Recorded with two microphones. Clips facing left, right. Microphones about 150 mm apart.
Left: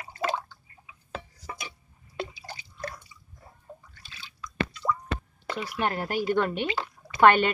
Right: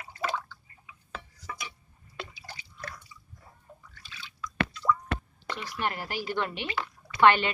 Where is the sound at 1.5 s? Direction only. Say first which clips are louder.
Left 1 dB; 30° left (ahead or behind).